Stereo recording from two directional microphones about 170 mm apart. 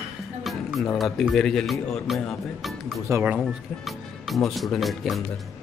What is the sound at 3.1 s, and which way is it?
Speech, 15° right (ahead or behind).